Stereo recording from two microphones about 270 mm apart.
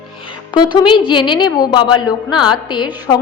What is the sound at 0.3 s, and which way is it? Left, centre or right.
A woman's voice, centre.